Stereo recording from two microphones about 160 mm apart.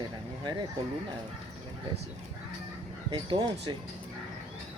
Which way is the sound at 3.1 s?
30° right (ahead or behind).